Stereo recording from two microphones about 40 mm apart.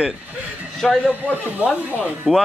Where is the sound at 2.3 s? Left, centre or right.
Right.